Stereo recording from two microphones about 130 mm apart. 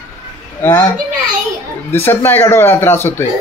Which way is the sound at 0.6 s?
15° left (ahead or behind).